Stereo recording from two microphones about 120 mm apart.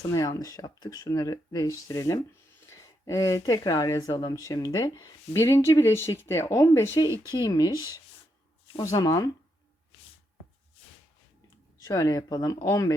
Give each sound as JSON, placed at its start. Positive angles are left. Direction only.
{"t": 0.0, "sound": "speech", "side_deg": 30}
{"t": 8.8, "sound": "speech", "side_deg": 30}
{"t": 11.8, "sound": "speech", "side_deg": 30}